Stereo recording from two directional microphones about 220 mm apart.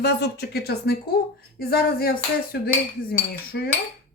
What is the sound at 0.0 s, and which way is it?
Speech, 45° left (ahead or behind).